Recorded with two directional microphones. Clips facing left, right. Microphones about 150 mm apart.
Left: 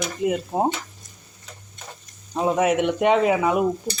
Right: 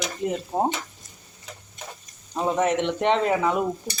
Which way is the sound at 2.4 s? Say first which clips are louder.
Left 3 dB; 10° left (ahead or behind).